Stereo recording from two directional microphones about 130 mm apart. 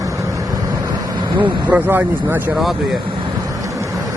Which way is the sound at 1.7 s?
15° right (ahead or behind).